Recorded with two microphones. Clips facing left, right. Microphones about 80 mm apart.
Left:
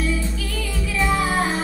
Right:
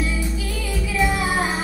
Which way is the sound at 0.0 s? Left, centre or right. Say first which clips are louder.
Left 1 dB; centre.